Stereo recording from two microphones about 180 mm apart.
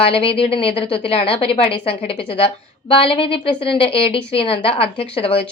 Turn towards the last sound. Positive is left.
turn(degrees=30)  # may be behind; listen again after turning